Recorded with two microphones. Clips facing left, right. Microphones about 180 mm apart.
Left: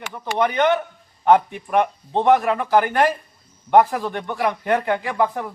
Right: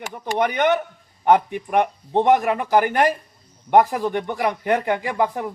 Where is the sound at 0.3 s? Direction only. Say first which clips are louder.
Left 1 dB; 15° right (ahead or behind).